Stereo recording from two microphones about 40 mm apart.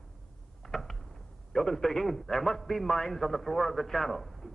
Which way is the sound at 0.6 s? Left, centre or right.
Centre.